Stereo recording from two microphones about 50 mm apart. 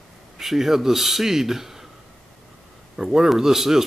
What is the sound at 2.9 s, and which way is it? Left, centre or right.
Speech, centre.